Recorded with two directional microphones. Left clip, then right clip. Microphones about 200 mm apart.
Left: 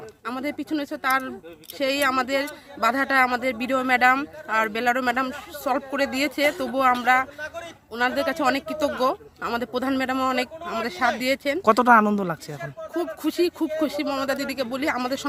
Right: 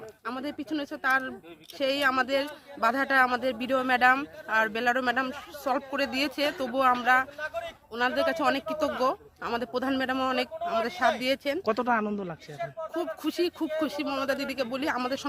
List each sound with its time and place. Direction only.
0.3 s a man's voice: 5° left (ahead or behind)
7.3 s speech: 25° right (ahead or behind)
7.9 s a man's voice: 5° left (ahead or behind)
11.6 s speech: 30° left (ahead or behind)
13.0 s a man's voice: 5° left (ahead or behind)